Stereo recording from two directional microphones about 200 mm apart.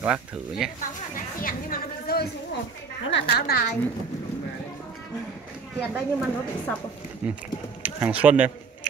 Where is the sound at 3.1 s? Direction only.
55° left (ahead or behind).